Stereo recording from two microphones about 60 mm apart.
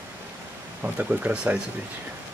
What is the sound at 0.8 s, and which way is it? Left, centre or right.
Speech, right.